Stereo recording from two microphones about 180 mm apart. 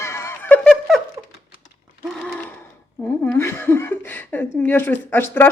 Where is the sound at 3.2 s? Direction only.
15° left (ahead or behind).